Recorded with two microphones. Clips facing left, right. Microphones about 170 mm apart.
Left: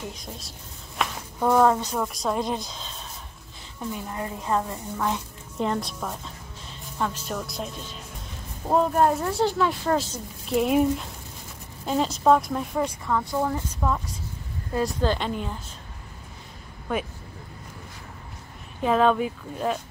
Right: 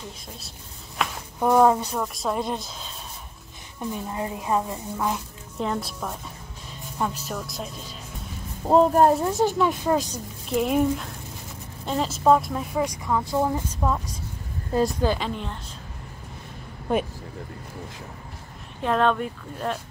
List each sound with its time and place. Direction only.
1.0 s a sound: centre (ahead or behind)
1.4 s speech: 10° right (ahead or behind)
2.0 s a woman's voice: centre (ahead or behind)
3.9 s a woman's voice: 20° right (ahead or behind); by 7.8 s centre (ahead or behind)
8.6 s speech: 30° right (ahead or behind)
9.4 s speech: 15° right (ahead or behind)
10.5 s a woman's voice: centre (ahead or behind)
12.8 s speech: 15° right (ahead or behind)
15.2 s a woman's voice: 5° left (ahead or behind)
18.8 s a woman's voice: 5° left (ahead or behind)